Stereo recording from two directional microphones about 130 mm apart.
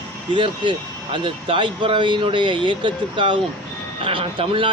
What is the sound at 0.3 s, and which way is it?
Speech, 40° right (ahead or behind).